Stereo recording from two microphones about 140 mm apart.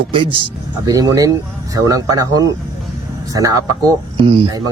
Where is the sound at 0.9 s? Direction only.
25° right (ahead or behind).